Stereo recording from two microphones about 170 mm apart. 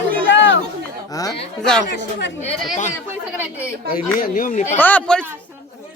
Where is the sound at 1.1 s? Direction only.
20° left (ahead or behind).